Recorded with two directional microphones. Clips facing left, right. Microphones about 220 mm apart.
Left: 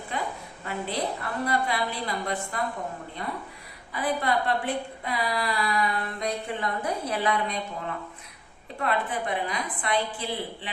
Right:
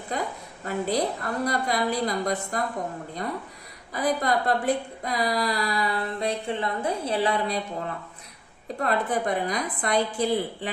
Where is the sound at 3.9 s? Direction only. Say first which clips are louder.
Right 2 dB; 40° right (ahead or behind).